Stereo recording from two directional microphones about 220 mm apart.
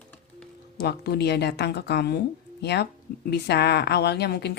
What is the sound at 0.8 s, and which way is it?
A woman's voice, 45° left (ahead or behind).